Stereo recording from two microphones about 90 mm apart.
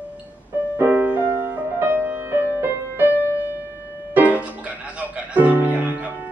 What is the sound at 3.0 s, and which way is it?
Music, 30° left (ahead or behind).